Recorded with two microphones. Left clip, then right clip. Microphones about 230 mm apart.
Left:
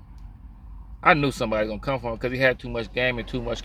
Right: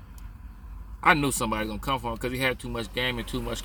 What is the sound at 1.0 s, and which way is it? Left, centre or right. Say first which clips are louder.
Speech: left 2 dB; centre.